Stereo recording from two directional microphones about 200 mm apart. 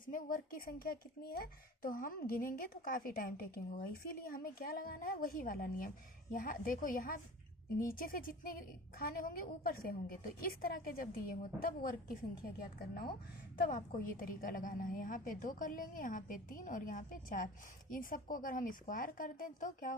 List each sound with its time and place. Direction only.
0.1 s a woman's voice: 40° left (ahead or behind)